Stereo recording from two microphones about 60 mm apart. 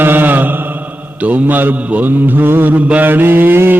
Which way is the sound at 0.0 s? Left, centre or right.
Right.